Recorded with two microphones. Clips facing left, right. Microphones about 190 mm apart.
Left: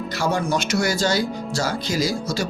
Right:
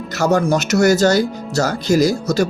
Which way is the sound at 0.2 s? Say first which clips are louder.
Right 7 dB; 45° right (ahead or behind).